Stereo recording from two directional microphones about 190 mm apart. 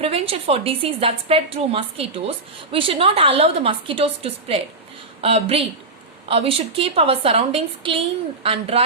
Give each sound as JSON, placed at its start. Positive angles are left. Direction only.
{"t": 0.0, "sound": "a woman's voice", "side_deg": -30}